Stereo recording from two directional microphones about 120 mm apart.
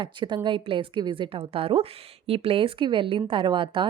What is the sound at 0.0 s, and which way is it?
A woman's voice, 40° right (ahead or behind).